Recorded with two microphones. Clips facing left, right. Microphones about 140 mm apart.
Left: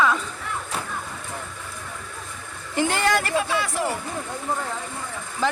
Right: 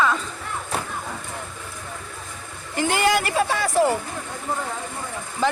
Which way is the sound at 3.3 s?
40° right (ahead or behind).